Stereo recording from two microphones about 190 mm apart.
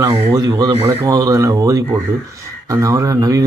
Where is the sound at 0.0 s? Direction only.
20° right (ahead or behind).